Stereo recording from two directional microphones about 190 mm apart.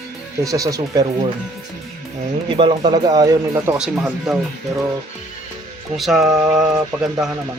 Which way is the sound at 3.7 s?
5° right (ahead or behind).